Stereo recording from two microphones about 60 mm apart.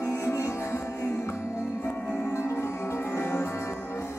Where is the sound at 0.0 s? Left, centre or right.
Left.